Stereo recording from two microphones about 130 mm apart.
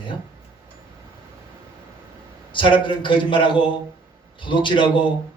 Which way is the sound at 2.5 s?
40° left (ahead or behind).